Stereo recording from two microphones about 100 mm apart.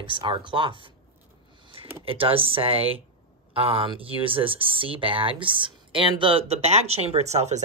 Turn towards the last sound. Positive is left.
turn(degrees=-90)